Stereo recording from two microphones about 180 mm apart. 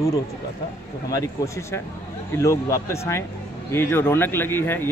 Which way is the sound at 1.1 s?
15° left (ahead or behind).